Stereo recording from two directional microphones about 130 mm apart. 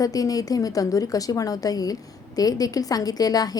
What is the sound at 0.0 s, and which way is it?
A woman's voice, 30° left (ahead or behind).